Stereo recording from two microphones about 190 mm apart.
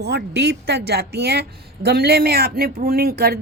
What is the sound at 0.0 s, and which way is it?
A woman's voice, 60° right (ahead or behind).